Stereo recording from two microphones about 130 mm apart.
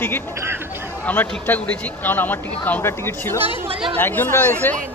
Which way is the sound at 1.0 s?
15° left (ahead or behind).